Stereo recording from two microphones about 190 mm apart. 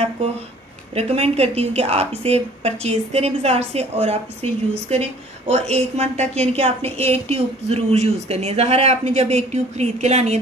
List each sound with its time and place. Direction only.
0.2 s speech: 35° right (ahead or behind)